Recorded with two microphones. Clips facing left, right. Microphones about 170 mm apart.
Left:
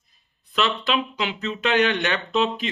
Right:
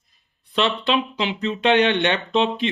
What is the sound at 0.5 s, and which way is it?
Speech, 30° right (ahead or behind).